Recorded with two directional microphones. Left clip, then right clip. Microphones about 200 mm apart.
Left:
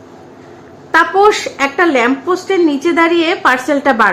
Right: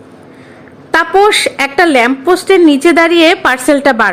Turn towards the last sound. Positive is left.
turn(degrees=-30)  # may be behind; listen again after turning